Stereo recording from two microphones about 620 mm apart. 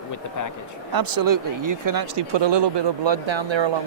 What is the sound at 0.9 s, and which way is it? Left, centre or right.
Speech, right.